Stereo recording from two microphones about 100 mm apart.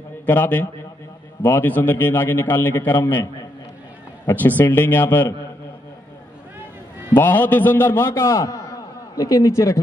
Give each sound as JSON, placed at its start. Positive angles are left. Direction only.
{"t": 0.3, "sound": "a man's voice", "side_deg": 20}
{"t": 4.3, "sound": "a man's voice", "side_deg": 20}
{"t": 7.2, "sound": "a man's voice", "side_deg": 20}